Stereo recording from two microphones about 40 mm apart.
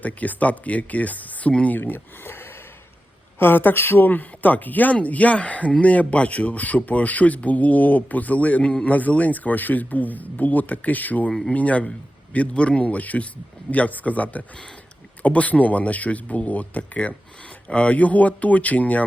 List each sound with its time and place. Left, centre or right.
0.0 s speech: left
1.8 s a man's voice: left
8.6 s a man's voice: left
8.9 s a man's voice: left